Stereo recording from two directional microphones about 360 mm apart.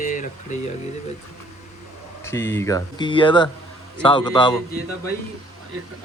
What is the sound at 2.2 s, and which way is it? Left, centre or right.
Speech, centre.